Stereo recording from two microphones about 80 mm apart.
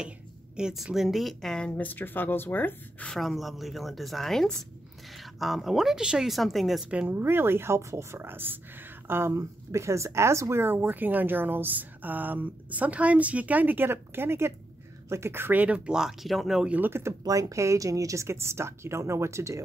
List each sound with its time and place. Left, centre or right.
0.6 s speech: centre
1.8 s speech: left
3.1 s speech: centre
6.9 s speech: right; by 16.6 s centre
16.6 s speech: centre
17.2 s speech: right